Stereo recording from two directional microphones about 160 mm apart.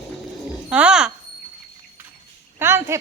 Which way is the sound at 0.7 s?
5° right (ahead or behind).